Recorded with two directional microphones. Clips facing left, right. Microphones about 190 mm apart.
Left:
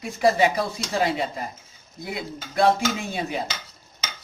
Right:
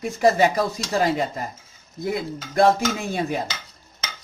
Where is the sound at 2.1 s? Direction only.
45° right (ahead or behind).